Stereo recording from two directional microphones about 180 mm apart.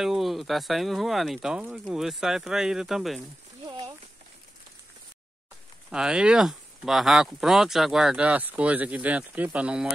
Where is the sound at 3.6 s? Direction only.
30° right (ahead or behind).